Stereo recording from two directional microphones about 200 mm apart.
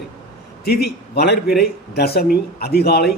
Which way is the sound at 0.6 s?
50° left (ahead or behind).